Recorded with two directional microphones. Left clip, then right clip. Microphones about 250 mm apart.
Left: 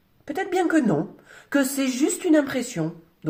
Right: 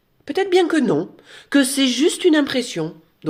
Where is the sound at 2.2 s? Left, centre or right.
Right.